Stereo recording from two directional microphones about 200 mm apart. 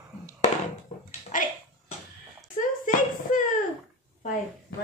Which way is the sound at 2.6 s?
40° left (ahead or behind).